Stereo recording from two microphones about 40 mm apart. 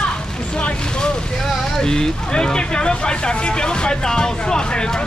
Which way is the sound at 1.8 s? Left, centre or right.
Centre.